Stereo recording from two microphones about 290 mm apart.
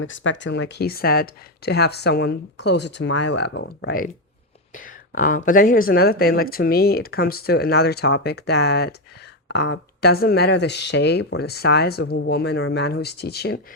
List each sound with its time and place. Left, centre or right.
0.0 s speech: left